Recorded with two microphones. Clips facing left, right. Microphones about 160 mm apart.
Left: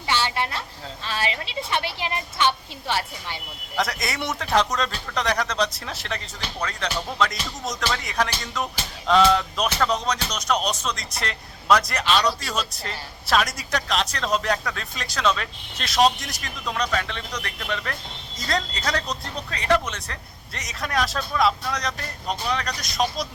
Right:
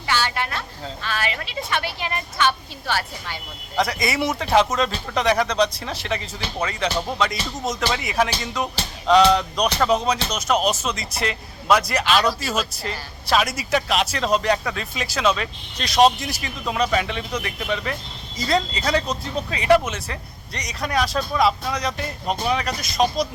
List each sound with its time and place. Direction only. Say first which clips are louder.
0.1 s a woman's voice: right 1 dB; 25° left (ahead or behind)
3.8 s music: right 4 dB; centre (ahead or behind)
7.9 s speech: right 3 dB; 5° right (ahead or behind)
9.3 s music: right 2 dB; centre (ahead or behind)